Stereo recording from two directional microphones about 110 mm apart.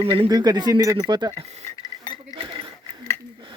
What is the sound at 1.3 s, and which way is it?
Speech, 85° right.